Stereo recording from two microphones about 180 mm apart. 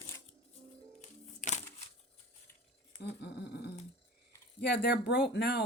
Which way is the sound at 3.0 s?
65° left (ahead or behind).